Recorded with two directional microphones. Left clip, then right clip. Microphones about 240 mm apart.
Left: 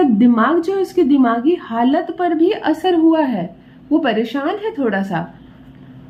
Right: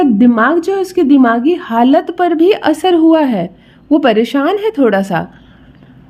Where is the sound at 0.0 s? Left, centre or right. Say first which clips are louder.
Right 4 dB; right.